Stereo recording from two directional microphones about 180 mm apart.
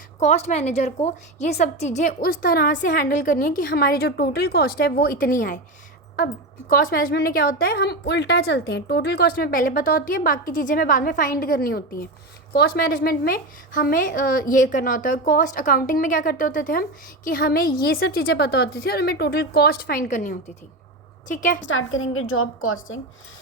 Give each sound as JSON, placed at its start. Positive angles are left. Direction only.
{"t": 0.2, "sound": "a woman's voice", "side_deg": 40}
{"t": 6.7, "sound": "a woman's voice", "side_deg": 55}
{"t": 21.6, "sound": "a woman's voice", "side_deg": 90}